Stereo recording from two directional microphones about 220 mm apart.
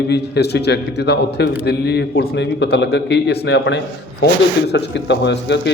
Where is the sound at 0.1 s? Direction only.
50° left (ahead or behind).